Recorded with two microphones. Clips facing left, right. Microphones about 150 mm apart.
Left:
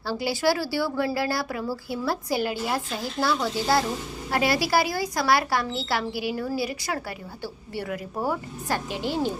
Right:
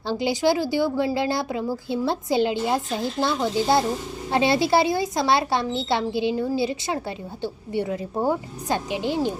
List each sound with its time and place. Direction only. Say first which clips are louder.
0.1 s speech: right 3 dB; 20° right (ahead or behind)